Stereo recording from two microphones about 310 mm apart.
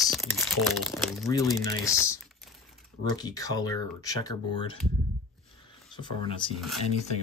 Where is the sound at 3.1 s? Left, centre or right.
Centre.